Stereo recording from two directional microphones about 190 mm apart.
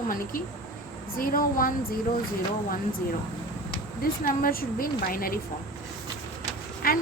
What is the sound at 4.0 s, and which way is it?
A woman's voice, 50° left (ahead or behind).